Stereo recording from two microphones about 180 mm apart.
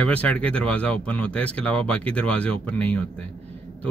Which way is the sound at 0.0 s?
5° left (ahead or behind).